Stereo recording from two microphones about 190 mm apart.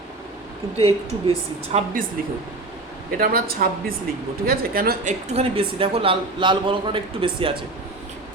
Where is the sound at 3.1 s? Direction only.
50° right (ahead or behind).